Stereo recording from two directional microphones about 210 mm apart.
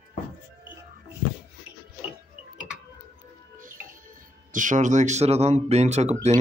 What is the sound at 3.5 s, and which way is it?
Speech, 40° right (ahead or behind).